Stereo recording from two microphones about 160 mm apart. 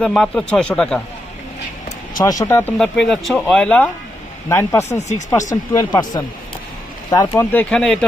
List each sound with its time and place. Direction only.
0.0 s speech: 5° left (ahead or behind)
2.1 s speech: 25° left (ahead or behind)
2.7 s speech: 5° left (ahead or behind)
4.4 s speech: 15° left (ahead or behind)
4.9 s speech: 45° left (ahead or behind)
5.3 s speech: 20° left (ahead or behind)
7.5 s speech: 10° left (ahead or behind)